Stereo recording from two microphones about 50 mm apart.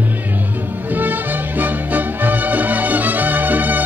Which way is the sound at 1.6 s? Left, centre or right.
Right.